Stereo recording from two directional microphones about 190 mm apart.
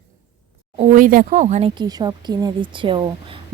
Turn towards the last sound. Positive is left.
turn(degrees=-25)  # may be behind; listen again after turning